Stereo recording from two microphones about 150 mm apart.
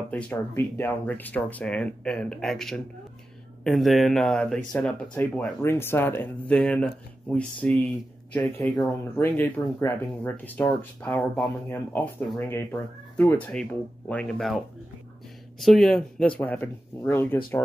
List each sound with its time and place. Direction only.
0.1 s speech: 10° left (ahead or behind)
15.6 s speech: centre (ahead or behind)